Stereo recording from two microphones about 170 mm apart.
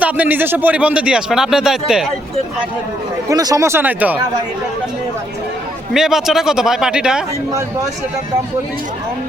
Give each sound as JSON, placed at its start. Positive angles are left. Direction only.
{"t": 0.0, "sound": "speech", "side_deg": -10}
{"t": 3.2, "sound": "speech", "side_deg": -20}
{"t": 5.9, "sound": "speech", "side_deg": 0}